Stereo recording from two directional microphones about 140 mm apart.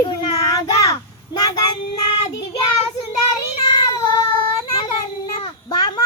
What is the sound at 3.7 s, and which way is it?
Cat, 30° left (ahead or behind).